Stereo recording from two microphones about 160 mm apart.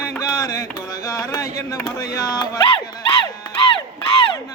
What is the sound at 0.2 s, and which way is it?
Music, 20° left (ahead or behind).